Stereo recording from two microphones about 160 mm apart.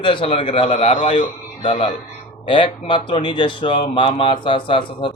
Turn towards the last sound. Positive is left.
turn(degrees=30)  # may be behind; listen again after turning